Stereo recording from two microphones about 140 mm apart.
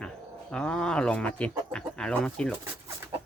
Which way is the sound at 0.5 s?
5° left (ahead or behind).